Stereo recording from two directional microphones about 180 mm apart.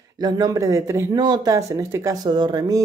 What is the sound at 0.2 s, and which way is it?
Speech, 20° right (ahead or behind).